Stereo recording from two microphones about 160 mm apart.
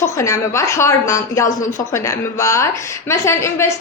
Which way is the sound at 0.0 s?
15° left (ahead or behind).